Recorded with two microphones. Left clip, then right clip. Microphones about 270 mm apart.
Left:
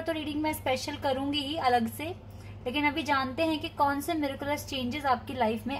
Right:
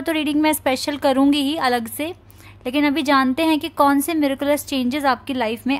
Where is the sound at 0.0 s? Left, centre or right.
Right.